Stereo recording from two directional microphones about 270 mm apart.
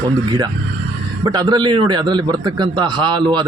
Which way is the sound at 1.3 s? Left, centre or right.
Centre.